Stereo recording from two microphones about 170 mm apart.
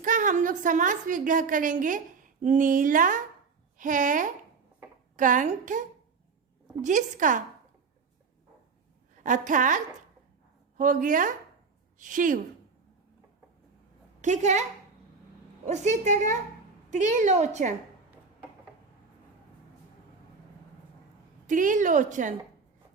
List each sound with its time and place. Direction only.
0.0 s a woman's voice: 50° right (ahead or behind)
6.8 s a woman's voice: 50° right (ahead or behind)
9.2 s a woman's voice: 45° right (ahead or behind)
14.2 s a woman's voice: 45° right (ahead or behind)
15.6 s a woman's voice: 40° right (ahead or behind)
21.4 s a woman's voice: 50° right (ahead or behind)